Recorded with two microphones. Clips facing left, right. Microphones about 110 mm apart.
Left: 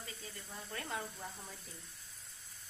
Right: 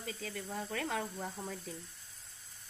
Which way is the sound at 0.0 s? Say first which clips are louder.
Right 8 dB; 80° right.